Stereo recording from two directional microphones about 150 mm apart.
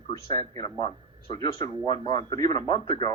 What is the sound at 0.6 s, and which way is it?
A man's voice, 30° left (ahead or behind).